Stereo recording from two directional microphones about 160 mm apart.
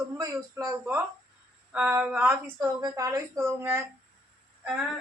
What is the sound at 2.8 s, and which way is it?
A woman's voice, 20° right (ahead or behind).